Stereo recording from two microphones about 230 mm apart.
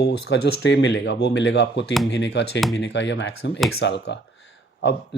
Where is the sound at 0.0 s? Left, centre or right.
Left.